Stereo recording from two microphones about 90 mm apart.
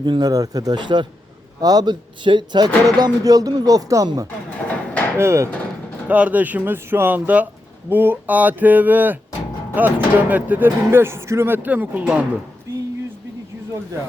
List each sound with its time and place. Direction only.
0.0 s speech: 50° right (ahead or behind)
0.8 s a man's voice: 60° right (ahead or behind); by 4.1 s 40° right (ahead or behind)
5.1 s speech: 30° right (ahead or behind)
6.1 s speech: 15° right (ahead or behind)
12.7 s a sound: 35° right (ahead or behind)